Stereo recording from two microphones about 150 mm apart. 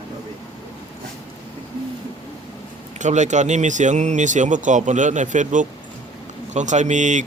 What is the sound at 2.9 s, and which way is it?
Speech, 55° right (ahead or behind).